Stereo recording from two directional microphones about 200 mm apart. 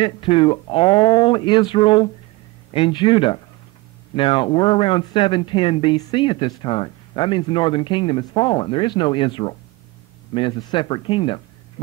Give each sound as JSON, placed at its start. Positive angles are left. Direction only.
{"t": 0.0, "sound": "speech", "side_deg": 25}